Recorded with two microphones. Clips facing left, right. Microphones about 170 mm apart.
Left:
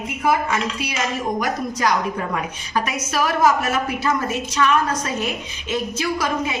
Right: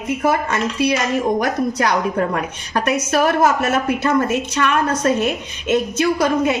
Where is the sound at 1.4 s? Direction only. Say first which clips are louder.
Right 3 dB; 65° right (ahead or behind).